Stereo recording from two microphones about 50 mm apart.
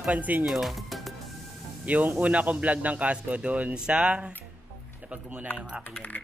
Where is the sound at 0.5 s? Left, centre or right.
Centre.